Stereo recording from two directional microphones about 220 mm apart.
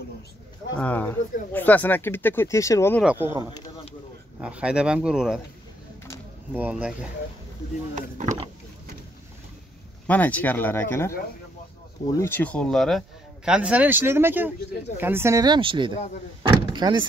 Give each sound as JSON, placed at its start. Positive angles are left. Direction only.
{"t": 0.7, "sound": "speech", "side_deg": 5}
{"t": 3.0, "sound": "speech", "side_deg": -5}
{"t": 3.5, "sound": "a sound", "side_deg": 20}
{"t": 4.4, "sound": "speech", "side_deg": -5}
{"t": 6.5, "sound": "speech", "side_deg": -5}
{"t": 7.9, "sound": "speech", "side_deg": -35}
{"t": 10.0, "sound": "speech", "side_deg": 5}
{"t": 16.4, "sound": "door", "side_deg": -20}